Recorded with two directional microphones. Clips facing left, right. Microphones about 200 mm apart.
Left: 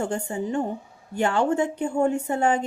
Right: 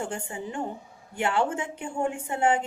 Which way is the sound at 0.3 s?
40° left (ahead or behind).